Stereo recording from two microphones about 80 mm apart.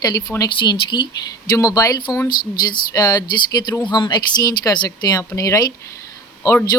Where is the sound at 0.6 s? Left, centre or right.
Left.